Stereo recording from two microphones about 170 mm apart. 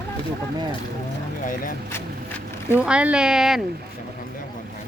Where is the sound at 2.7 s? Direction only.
5° right (ahead or behind).